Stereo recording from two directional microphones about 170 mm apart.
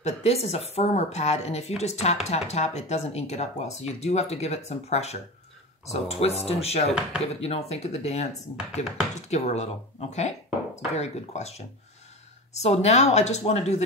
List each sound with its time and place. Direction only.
0.0 s speech: 40° left (ahead or behind)